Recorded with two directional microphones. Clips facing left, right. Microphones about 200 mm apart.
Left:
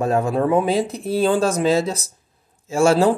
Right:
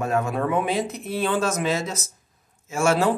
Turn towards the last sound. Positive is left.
turn(degrees=35)  # may be behind; listen again after turning